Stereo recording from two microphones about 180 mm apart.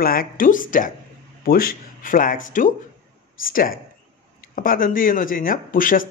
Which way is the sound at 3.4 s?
50° left (ahead or behind).